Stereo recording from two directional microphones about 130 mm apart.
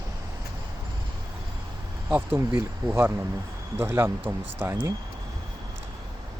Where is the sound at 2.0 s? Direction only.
15° right (ahead or behind).